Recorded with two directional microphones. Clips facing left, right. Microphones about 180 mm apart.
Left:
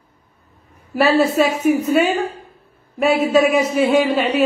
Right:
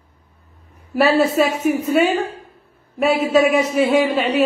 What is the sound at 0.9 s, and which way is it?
Speech, centre (ahead or behind).